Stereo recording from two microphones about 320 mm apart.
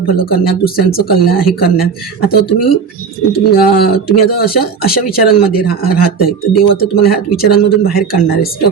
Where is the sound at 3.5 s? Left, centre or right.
Left.